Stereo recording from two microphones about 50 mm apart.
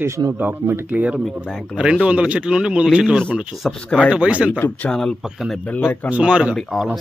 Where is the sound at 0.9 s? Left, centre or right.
Right.